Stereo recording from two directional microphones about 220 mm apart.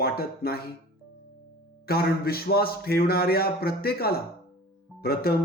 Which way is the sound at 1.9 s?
45° left (ahead or behind).